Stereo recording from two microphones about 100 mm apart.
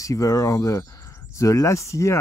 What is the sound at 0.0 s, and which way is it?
Speech, 35° left (ahead or behind).